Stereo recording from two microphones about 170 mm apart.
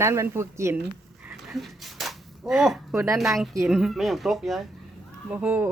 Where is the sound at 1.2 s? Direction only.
Centre (ahead or behind).